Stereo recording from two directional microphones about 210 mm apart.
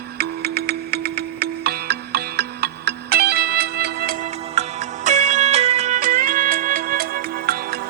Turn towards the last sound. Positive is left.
turn(degrees=-45)  # may be behind; listen again after turning